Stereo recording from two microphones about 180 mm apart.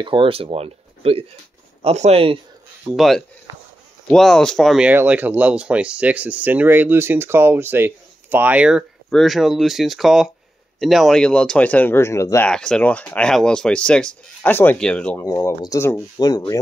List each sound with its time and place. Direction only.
0.0 s speech: 30° right (ahead or behind)
2.9 s speech: centre (ahead or behind); by 12.4 s 15° left (ahead or behind)
12.4 s speech: 5° left (ahead or behind)
15.2 s speech: 20° left (ahead or behind)